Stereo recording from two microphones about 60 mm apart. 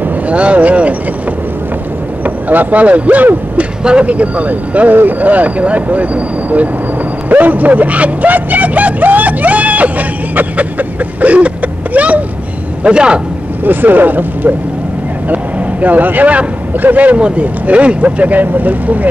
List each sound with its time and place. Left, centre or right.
0.0 s vehicle: right
2.2 s a man's voice: right
7.2 s vehicle: right
12.8 s speech: centre
13.7 s a man's voice: right